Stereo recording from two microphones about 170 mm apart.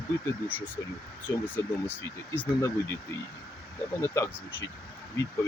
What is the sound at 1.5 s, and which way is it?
Speech, 10° left (ahead or behind).